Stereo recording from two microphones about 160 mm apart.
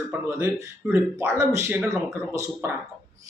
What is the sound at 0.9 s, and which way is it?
Speech, 20° right (ahead or behind).